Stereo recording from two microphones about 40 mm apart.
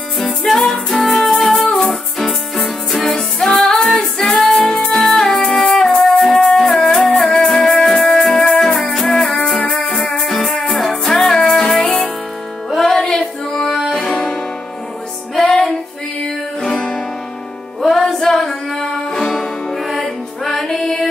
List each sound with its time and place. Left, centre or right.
0.5 s music: centre
14.0 s music: left
15.4 s music: centre